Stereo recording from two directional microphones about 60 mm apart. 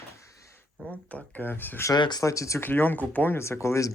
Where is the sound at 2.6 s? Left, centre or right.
Left.